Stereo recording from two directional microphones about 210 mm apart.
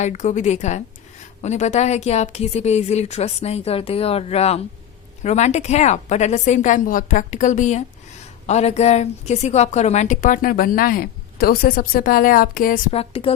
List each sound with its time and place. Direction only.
0.0 s a woman's voice: 35° left (ahead or behind)
13.0 s speech: 25° left (ahead or behind)